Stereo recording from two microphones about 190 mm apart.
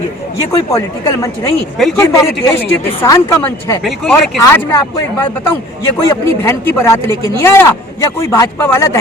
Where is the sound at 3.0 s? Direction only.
15° left (ahead or behind).